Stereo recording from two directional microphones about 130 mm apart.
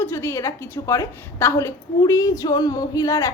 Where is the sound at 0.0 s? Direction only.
20° left (ahead or behind).